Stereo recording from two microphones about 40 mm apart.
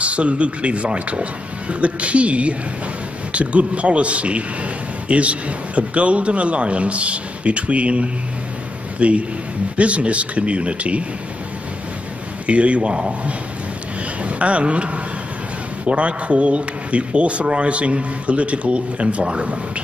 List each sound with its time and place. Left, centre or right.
0.0 s speech: right
12.4 s speech: right
14.4 s speech: right